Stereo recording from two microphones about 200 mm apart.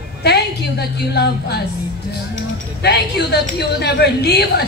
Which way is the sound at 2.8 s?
55° left (ahead or behind).